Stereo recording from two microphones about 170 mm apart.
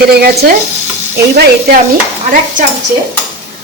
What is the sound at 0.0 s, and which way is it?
Speech, 65° right (ahead or behind).